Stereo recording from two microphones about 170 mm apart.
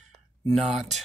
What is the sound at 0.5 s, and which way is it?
Speech, centre (ahead or behind).